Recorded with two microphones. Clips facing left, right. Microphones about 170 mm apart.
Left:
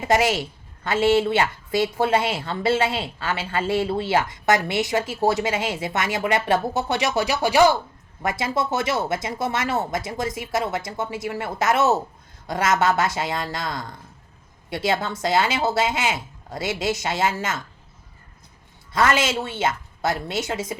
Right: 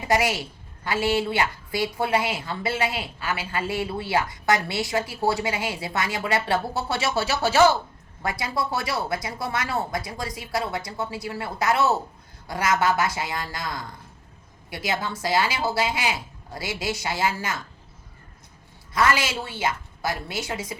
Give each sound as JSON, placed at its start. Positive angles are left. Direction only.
{"t": 0.1, "sound": "a woman's voice", "side_deg": 25}
{"t": 18.9, "sound": "a woman's voice", "side_deg": 25}